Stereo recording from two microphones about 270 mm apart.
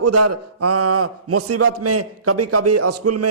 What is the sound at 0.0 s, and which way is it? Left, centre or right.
A man's voice, right.